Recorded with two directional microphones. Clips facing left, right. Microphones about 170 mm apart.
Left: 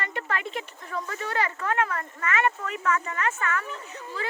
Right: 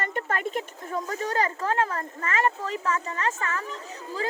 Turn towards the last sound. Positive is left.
turn(degrees=-35)  # may be behind; listen again after turning